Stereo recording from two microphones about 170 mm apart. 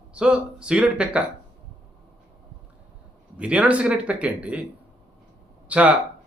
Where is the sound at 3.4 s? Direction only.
5° right (ahead or behind).